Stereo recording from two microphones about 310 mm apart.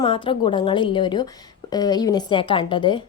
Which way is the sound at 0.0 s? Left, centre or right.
Centre.